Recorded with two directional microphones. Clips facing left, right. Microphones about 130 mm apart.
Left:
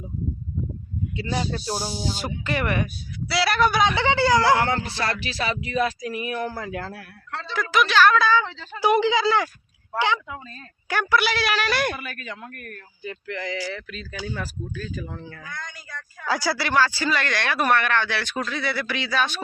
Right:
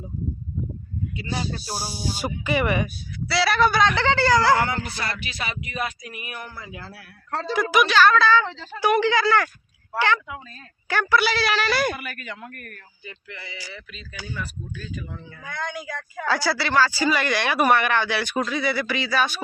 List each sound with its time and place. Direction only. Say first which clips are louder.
1.9 s speech: even; 10° right (ahead or behind)
3.8 s music: even; 15° left (ahead or behind); by 6.5 s 40° left (ahead or behind)
6.7 s speech: left 8 dB; 50° left (ahead or behind)
7.3 s speech: right 6 dB; 40° right (ahead or behind)
7.5 s speech: right 2 dB; 10° right (ahead or behind)
7.9 s speech: even; centre (ahead or behind)
8.9 s speech: even; 15° left (ahead or behind)
10.8 s speech: right 1 dB; 5° left (ahead or behind)
12.2 s speech: even; 15° left (ahead or behind)
13.2 s speech: left 12 dB; 90° left
14.3 s speech: left 2 dB; 45° left (ahead or behind)
15.4 s a woman's voice: right 7 dB; 60° right (ahead or behind)
16.3 s speech: even; centre (ahead or behind)